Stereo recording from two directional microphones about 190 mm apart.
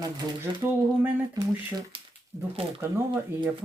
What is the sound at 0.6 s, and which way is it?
Speech, 10° right (ahead or behind).